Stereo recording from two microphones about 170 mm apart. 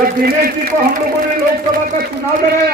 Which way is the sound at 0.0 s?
60° right (ahead or behind).